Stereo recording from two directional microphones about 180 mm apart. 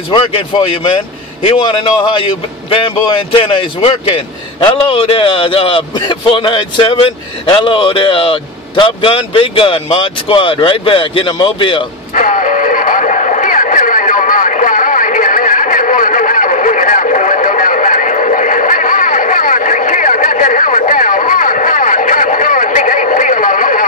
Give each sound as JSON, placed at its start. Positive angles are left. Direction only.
{"t": 0.1, "sound": "speech", "side_deg": 30}
{"t": 12.2, "sound": "radio", "side_deg": 45}